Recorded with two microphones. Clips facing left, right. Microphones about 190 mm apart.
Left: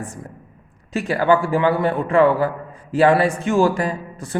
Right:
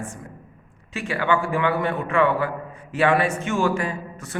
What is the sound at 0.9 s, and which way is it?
A man's voice, 40° left (ahead or behind).